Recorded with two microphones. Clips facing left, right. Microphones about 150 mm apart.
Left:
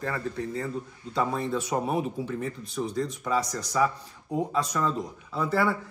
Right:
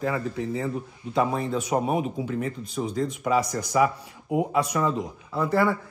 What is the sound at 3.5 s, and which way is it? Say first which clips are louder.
Speech: right 4 dB; 15° right (ahead or behind).